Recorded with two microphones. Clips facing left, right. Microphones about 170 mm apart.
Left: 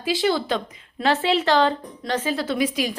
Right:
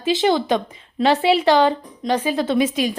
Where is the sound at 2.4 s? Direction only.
25° right (ahead or behind).